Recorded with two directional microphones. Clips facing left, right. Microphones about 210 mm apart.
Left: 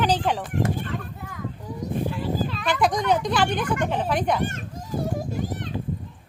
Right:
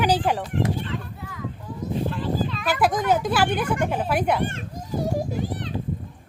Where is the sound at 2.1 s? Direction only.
10° left (ahead or behind).